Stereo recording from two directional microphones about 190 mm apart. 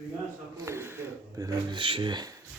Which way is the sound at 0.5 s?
15° right (ahead or behind).